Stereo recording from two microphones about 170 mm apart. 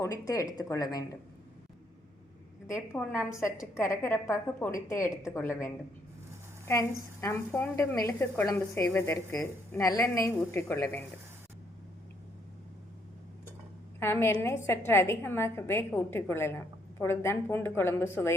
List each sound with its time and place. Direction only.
0.0 s speech: 20° left (ahead or behind)
2.9 s a woman's voice: 15° left (ahead or behind)
7.2 s a woman's voice: 15° left (ahead or behind)
14.0 s a woman's voice: 15° left (ahead or behind)